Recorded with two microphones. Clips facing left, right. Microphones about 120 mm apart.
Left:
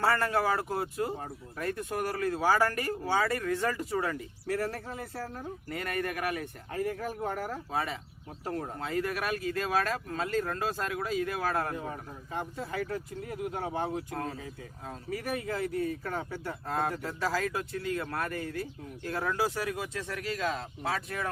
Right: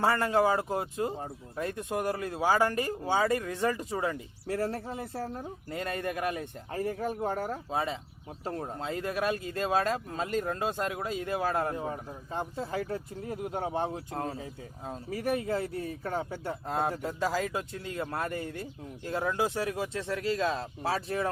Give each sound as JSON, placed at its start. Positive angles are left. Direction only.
{"t": 0.0, "sound": "speech", "side_deg": -20}